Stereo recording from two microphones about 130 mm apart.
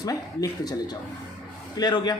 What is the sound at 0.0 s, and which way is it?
Speech, 30° left (ahead or behind).